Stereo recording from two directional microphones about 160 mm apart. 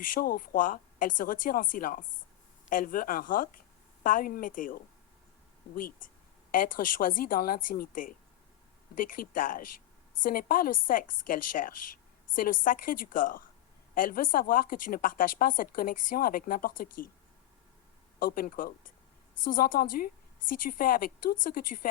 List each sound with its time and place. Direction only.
0.1 s a woman's voice: 60° left (ahead or behind)
6.5 s a woman's voice: 60° left (ahead or behind)
18.2 s a woman's voice: 65° left (ahead or behind)